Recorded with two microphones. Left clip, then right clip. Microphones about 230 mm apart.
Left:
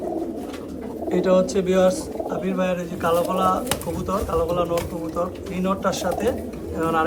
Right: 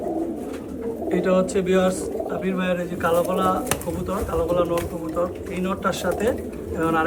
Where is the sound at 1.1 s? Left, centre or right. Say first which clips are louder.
Left 2 dB; centre.